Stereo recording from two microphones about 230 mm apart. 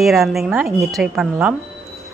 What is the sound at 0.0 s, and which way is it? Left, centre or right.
Speech, centre.